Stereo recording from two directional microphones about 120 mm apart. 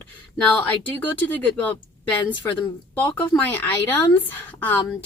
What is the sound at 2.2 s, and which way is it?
Speech, 35° left (ahead or behind).